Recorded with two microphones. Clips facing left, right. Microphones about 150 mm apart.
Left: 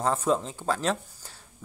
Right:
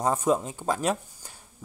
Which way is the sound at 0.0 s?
15° right (ahead or behind).